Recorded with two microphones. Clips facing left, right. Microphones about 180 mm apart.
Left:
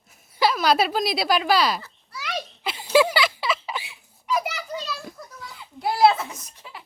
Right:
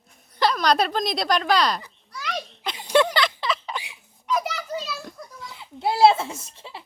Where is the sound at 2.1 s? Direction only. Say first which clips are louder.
Even; 5° left (ahead or behind).